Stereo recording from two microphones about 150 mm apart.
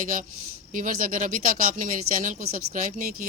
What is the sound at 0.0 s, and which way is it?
A woman's voice, 60° right (ahead or behind).